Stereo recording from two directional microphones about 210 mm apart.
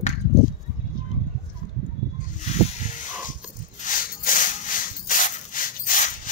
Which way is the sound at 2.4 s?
35° left (ahead or behind).